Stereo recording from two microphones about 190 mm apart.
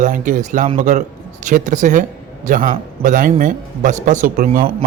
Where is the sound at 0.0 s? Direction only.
45° right (ahead or behind).